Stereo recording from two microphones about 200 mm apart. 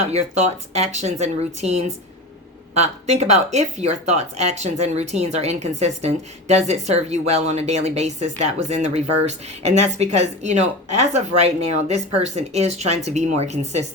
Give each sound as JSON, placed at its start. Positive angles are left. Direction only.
{"t": 0.1, "sound": "speech", "side_deg": -35}